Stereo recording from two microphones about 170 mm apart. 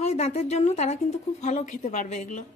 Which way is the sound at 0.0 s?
40° left (ahead or behind).